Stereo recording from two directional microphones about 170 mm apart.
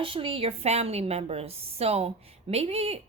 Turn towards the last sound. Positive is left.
turn(degrees=-35)  # may be behind; listen again after turning